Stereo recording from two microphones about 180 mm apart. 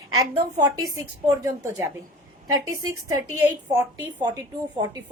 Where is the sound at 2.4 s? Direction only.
20° right (ahead or behind).